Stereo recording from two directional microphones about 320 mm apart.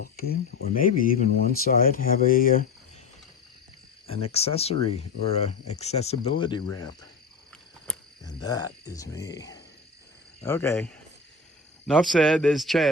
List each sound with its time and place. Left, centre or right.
0.0 s speech: left
4.1 s speech: centre
7.5 s cricket: centre
10.4 s a man's voice: centre